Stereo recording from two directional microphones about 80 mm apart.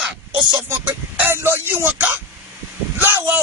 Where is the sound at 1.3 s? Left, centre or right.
Right.